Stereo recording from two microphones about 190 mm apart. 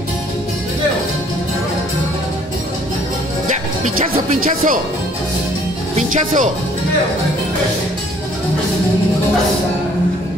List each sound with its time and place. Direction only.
3.8 s speech: 40° right (ahead or behind)
5.9 s speech: 40° right (ahead or behind)